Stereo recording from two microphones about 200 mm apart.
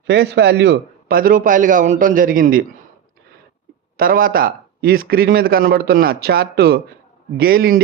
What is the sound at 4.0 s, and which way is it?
A man's voice, 45° right (ahead or behind).